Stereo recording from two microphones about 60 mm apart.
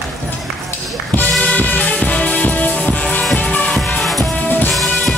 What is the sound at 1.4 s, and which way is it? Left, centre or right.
Music, left.